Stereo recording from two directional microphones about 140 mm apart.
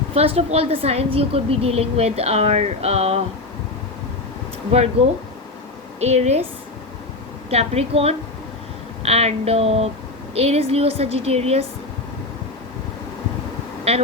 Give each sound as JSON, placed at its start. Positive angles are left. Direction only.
{"t": 0.1, "sound": "a woman's voice", "side_deg": -45}
{"t": 6.0, "sound": "a woman's voice", "side_deg": -50}
{"t": 7.5, "sound": "a woman's voice", "side_deg": -50}
{"t": 13.9, "sound": "a woman's voice", "side_deg": -50}